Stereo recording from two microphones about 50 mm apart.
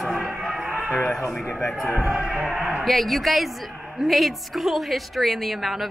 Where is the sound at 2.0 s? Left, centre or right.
Centre.